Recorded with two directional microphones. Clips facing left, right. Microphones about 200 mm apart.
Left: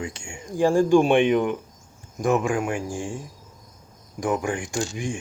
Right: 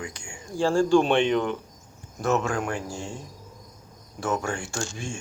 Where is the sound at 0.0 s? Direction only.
25° left (ahead or behind).